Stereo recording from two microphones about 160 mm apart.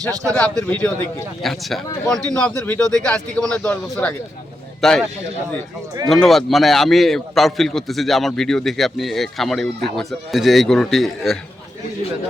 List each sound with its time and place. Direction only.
0.0 s speech: 20° right (ahead or behind)
0.3 s a man's voice: 5° left (ahead or behind)
6.1 s a man's voice: centre (ahead or behind)